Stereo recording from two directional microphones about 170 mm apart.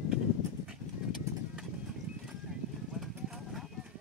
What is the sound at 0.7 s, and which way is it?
Clip-clop, 5° right (ahead or behind).